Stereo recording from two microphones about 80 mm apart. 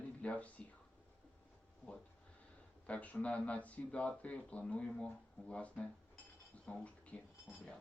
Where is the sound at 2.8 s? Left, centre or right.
Centre.